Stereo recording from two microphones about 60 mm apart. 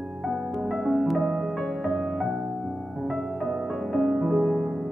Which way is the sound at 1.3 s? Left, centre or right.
Centre.